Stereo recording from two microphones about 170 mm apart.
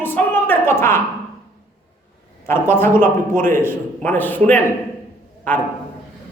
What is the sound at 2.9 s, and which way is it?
Speech, 50° right (ahead or behind).